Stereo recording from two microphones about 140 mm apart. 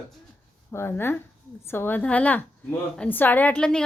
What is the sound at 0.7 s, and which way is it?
A woman's voice, 15° left (ahead or behind).